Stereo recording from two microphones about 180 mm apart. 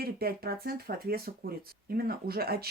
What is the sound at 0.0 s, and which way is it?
Speech, 60° right (ahead or behind).